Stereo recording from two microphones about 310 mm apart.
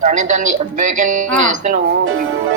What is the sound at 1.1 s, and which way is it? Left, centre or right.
Speech, right.